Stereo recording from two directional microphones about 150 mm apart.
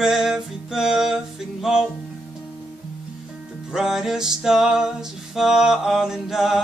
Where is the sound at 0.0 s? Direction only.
5° right (ahead or behind).